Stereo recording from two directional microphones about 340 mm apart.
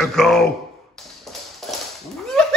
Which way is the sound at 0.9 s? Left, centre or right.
Centre.